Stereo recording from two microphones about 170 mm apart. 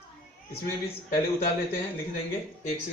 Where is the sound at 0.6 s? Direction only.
60° left (ahead or behind).